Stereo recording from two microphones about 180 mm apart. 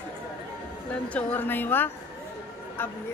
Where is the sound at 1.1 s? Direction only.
10° left (ahead or behind).